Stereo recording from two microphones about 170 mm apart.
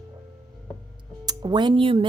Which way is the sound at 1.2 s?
25° right (ahead or behind).